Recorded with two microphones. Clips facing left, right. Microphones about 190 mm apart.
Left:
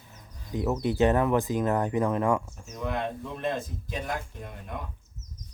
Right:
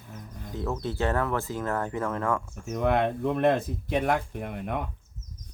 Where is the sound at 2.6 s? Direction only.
60° right (ahead or behind).